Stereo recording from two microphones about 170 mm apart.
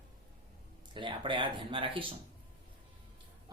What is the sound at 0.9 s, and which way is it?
Speech, 30° right (ahead or behind).